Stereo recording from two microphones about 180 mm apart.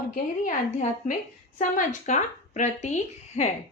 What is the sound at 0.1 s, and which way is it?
A woman's voice, 45° left (ahead or behind).